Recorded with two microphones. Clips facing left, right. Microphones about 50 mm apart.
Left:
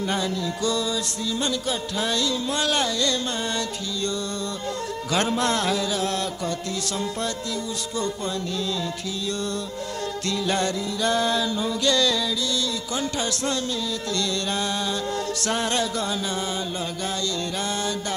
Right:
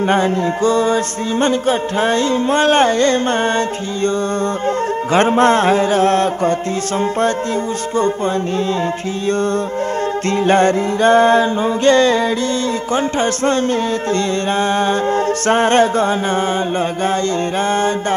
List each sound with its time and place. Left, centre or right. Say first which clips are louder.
0.0 s music: right 11 dB; right
5.1 s music: right 11 dB; right
10.3 s music: right 12 dB; right